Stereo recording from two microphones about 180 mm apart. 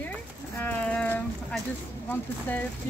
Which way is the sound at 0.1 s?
10° left (ahead or behind).